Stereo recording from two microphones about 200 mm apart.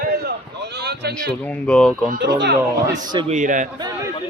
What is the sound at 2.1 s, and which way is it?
Speech, 55° right (ahead or behind).